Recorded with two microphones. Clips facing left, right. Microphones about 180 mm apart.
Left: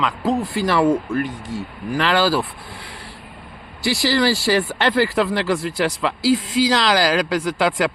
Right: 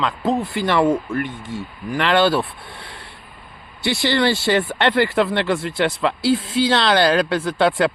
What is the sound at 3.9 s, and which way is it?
Speech, 35° left (ahead or behind).